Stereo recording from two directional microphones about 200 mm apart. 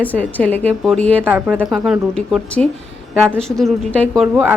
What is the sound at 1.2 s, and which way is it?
Speech, 5° right (ahead or behind).